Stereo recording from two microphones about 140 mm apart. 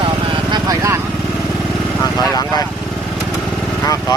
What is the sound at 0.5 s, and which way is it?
Vehicle, 25° right (ahead or behind).